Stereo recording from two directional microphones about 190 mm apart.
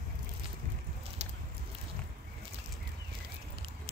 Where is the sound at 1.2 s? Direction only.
35° right (ahead or behind).